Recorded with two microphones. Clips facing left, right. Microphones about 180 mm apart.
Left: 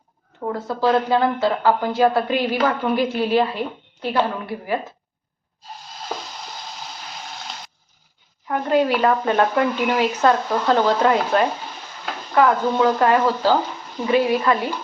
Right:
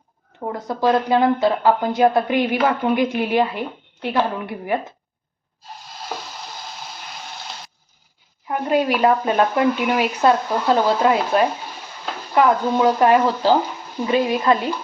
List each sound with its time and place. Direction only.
0.7 s a woman's voice: 15° right (ahead or behind)
8.4 s a woman's voice: 10° right (ahead or behind)